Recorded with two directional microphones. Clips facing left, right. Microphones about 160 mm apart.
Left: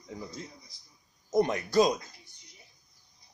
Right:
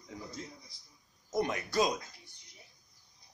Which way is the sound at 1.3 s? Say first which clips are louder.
Left 6 dB; 35° left (ahead or behind).